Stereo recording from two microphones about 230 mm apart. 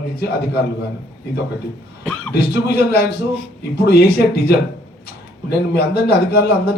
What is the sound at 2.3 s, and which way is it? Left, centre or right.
Speech, left.